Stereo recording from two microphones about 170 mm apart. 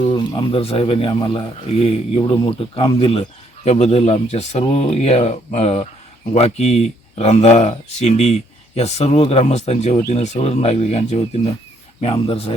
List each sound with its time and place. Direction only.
0.1 s speech: 30° left (ahead or behind)